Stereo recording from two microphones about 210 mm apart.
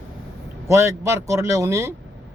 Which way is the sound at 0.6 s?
15° right (ahead or behind).